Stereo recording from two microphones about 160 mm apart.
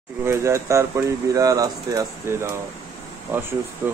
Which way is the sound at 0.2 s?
15° right (ahead or behind).